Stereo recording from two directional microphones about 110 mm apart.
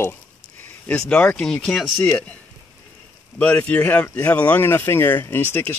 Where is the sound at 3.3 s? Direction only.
15° left (ahead or behind).